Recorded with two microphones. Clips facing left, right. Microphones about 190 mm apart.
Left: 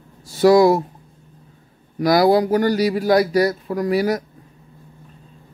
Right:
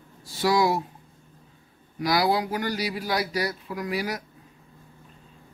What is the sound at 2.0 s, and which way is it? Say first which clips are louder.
A man's voice: left 9 dB; 45° left (ahead or behind).